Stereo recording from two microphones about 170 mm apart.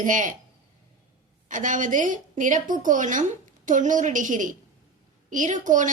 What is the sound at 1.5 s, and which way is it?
A woman's voice, 50° right (ahead or behind).